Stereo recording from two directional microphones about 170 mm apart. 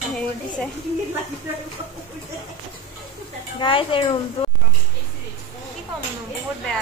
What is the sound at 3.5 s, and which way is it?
Speech, 30° left (ahead or behind).